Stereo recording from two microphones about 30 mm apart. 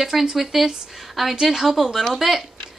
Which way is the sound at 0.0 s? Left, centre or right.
Centre.